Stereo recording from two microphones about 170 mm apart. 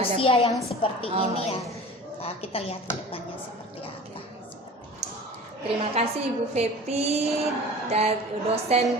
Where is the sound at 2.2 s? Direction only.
35° left (ahead or behind).